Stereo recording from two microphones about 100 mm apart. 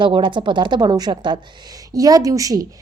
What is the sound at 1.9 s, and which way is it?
Speech, 35° right (ahead or behind).